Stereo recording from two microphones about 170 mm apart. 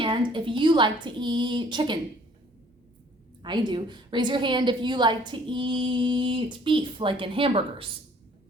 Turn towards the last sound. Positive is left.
turn(degrees=-30)  # may be behind; listen again after turning